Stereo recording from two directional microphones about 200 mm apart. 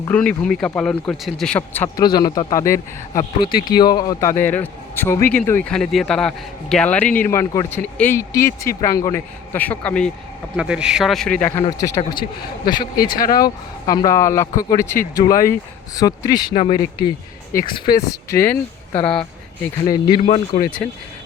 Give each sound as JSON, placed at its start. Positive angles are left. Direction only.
{"t": 0.1, "sound": "speech", "side_deg": 5}
{"t": 2.0, "sound": "a man's voice", "side_deg": 20}
{"t": 11.6, "sound": "a man's voice", "side_deg": 15}
{"t": 19.9, "sound": "speech", "side_deg": 25}
{"t": 20.7, "sound": "a man's voice", "side_deg": 5}